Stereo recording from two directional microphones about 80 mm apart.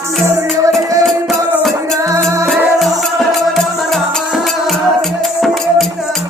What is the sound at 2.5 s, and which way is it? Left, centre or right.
Music, centre.